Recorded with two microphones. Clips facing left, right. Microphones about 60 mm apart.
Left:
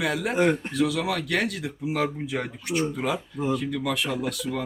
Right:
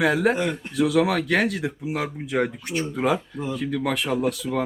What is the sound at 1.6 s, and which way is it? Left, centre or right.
Speech, centre.